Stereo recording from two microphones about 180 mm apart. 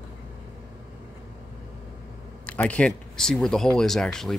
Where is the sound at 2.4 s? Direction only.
5° left (ahead or behind).